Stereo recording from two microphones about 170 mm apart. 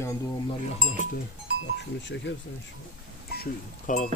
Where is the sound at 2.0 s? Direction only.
90° left.